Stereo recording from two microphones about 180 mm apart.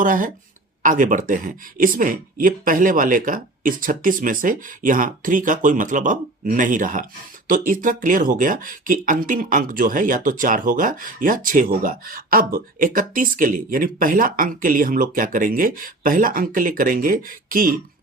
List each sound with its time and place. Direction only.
0.0 s speech: 45° right (ahead or behind)